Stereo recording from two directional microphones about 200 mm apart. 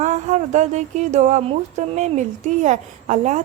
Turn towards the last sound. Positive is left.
turn(degrees=-35)  # may be behind; listen again after turning